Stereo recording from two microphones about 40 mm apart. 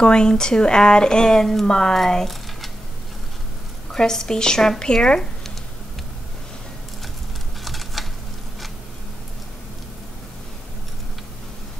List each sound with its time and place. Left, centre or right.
0.0 s speech: left
3.9 s speech: centre
7.6 s a sound: centre